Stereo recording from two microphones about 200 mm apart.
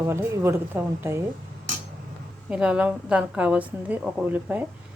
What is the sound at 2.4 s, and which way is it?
A woman's voice, 5° right (ahead or behind).